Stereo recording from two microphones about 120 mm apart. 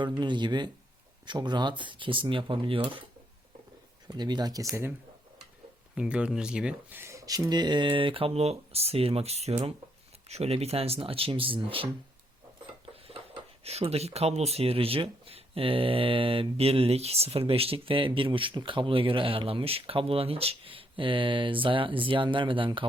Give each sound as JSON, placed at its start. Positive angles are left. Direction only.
{"t": 0.2, "sound": "speech", "side_deg": -40}
{"t": 4.1, "sound": "speech", "side_deg": -35}
{"t": 5.9, "sound": "speech", "side_deg": -5}